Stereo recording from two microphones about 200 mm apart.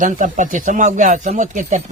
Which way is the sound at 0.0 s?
40° right (ahead or behind).